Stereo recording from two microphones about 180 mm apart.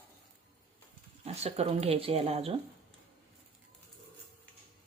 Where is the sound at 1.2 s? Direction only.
35° right (ahead or behind).